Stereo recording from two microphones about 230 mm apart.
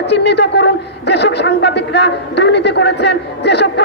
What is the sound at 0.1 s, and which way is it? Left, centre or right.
A man's voice, left.